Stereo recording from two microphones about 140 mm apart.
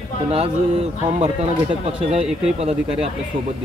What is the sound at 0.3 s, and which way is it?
Speech, 45° right (ahead or behind).